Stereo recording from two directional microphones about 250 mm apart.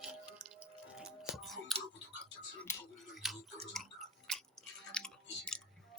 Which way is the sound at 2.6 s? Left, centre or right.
Centre.